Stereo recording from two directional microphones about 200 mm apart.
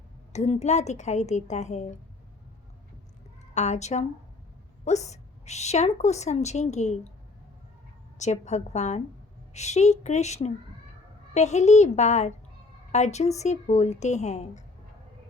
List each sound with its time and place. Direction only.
0.3 s a woman's voice: 35° left (ahead or behind)
3.5 s a woman's voice: 35° left (ahead or behind)
8.2 s a woman's voice: 35° left (ahead or behind)